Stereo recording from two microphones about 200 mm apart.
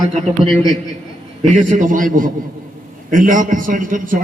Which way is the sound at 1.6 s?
40° right (ahead or behind).